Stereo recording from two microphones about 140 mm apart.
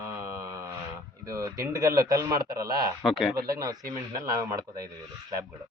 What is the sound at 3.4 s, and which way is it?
Speech, 25° right (ahead or behind).